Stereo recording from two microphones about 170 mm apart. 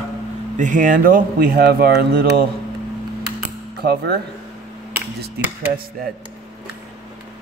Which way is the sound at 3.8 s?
70° right (ahead or behind).